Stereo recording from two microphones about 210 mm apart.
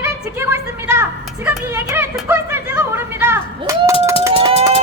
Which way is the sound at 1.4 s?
10° right (ahead or behind).